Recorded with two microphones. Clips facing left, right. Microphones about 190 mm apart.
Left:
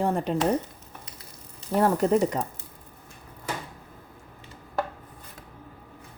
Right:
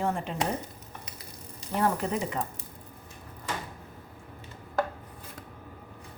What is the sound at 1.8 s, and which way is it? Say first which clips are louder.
Speech: left 7 dB; 40° left (ahead or behind).